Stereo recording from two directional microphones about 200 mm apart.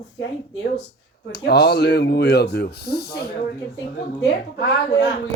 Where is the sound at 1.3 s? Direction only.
55° left (ahead or behind).